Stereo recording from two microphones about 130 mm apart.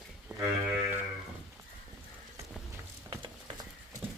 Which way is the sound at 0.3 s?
10° right (ahead or behind).